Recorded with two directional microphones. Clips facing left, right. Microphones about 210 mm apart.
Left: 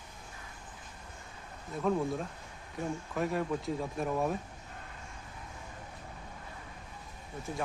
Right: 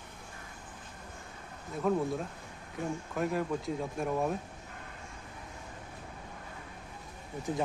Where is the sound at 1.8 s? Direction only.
Centre (ahead or behind).